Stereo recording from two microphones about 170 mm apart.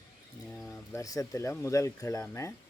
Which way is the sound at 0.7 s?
20° left (ahead or behind).